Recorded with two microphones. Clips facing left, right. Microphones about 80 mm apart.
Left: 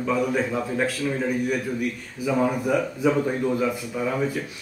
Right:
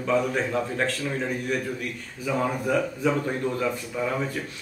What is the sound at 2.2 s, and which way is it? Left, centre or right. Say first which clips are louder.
A man's voice: left 3 dB; centre.